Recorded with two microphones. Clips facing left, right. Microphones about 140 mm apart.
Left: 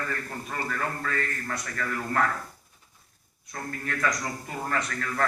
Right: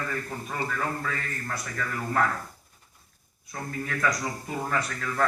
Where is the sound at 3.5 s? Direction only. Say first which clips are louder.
Right 1 dB; 5° right (ahead or behind).